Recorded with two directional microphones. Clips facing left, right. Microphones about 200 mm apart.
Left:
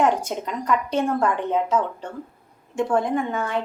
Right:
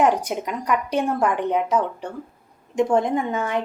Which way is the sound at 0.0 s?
15° right (ahead or behind).